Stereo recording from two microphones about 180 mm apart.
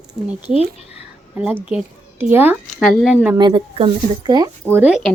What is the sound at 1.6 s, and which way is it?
A woman's voice, 5° right (ahead or behind).